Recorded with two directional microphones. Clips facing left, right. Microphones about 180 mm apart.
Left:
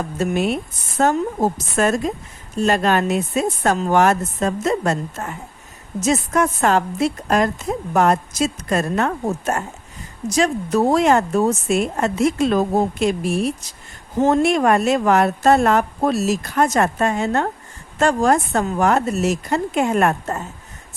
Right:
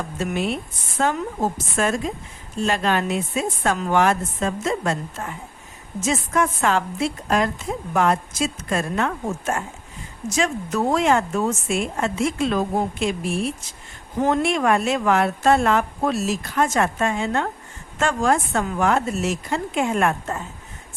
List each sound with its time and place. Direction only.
0.3 s a woman's voice: 45° left (ahead or behind)